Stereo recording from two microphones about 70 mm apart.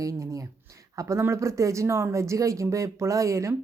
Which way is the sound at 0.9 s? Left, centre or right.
Right.